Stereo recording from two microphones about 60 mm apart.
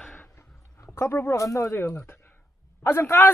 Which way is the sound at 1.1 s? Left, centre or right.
Left.